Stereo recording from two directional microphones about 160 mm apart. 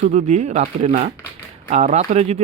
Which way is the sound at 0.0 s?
45° right (ahead or behind).